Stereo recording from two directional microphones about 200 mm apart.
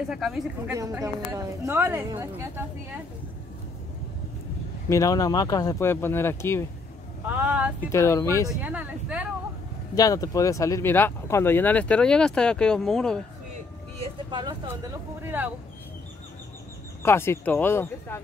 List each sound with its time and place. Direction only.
0.1 s speech: centre (ahead or behind)
0.7 s a woman's voice: 15° right (ahead or behind)
4.8 s speech: 15° left (ahead or behind)
7.2 s speech: 10° right (ahead or behind)
7.9 s speech: 15° left (ahead or behind)
8.5 s a woman's voice: 5° right (ahead or behind)
9.9 s speech: 15° left (ahead or behind)
13.9 s speech: 25° right (ahead or behind)
15.2 s a woman's voice: 10° right (ahead or behind)
17.0 s speech: 10° left (ahead or behind)